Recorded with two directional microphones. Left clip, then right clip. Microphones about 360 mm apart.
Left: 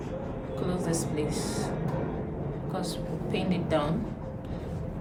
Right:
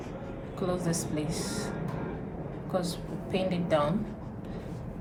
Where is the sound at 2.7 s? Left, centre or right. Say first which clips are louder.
Right 3 dB; centre.